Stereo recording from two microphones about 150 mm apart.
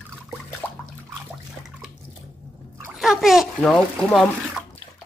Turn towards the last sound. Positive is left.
turn(degrees=5)  # may be behind; listen again after turning